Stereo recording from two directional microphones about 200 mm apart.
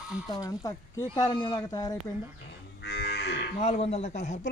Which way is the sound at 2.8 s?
55° left (ahead or behind).